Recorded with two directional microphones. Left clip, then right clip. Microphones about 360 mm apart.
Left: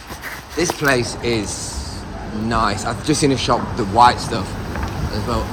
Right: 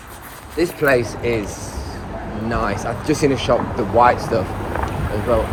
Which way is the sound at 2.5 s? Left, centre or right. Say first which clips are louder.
Left 3 dB; centre.